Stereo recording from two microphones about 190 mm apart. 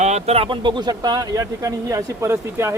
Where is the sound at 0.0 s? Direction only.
35° right (ahead or behind).